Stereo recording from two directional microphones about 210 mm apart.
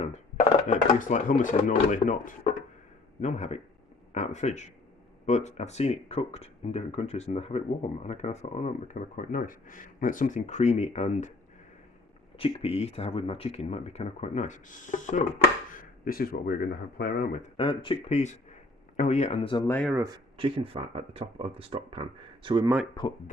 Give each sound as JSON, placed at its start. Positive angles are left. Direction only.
{"t": 0.0, "sound": "speech", "side_deg": 30}
{"t": 12.4, "sound": "speech", "side_deg": 30}
{"t": 17.6, "sound": "speech", "side_deg": 25}
{"t": 19.6, "sound": "speech", "side_deg": 10}
{"t": 19.9, "sound": "speech", "side_deg": -15}
{"t": 20.3, "sound": "speech", "side_deg": -25}